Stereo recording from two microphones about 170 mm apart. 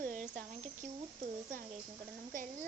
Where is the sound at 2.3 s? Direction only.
55° right (ahead or behind).